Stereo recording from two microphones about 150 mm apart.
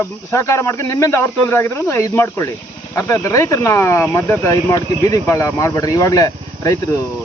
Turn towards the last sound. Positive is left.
turn(degrees=20)  # may be behind; listen again after turning